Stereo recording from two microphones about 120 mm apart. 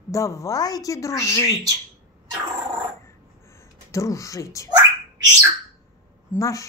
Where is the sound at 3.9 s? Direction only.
25° left (ahead or behind).